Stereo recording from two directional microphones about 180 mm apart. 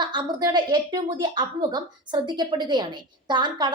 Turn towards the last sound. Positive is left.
turn(degrees=-25)  # may be behind; listen again after turning